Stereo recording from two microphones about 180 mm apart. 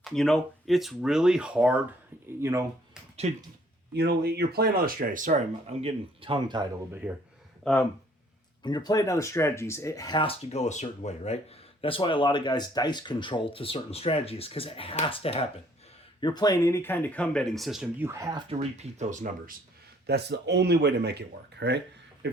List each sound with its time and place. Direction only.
0.0 s speech: centre (ahead or behind); by 2.6 s 15° right (ahead or behind)
3.2 s speech: 40° right (ahead or behind)
3.9 s speech: 65° right (ahead or behind); by 6.7 s 25° right (ahead or behind)
7.0 s speech: 10° right (ahead or behind)
7.6 s speech: 5° left (ahead or behind)
8.6 s speech: 25° left (ahead or behind); by 17.8 s centre (ahead or behind)
18.0 s speech: 15° right (ahead or behind)
18.4 s speech: 35° right (ahead or behind)
20.1 s speech: 65° right (ahead or behind)